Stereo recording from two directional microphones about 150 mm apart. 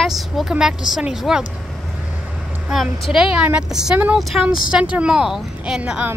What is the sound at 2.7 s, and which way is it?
A woman's voice, centre (ahead or behind).